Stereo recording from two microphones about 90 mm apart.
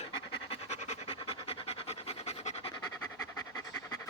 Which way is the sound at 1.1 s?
85° left.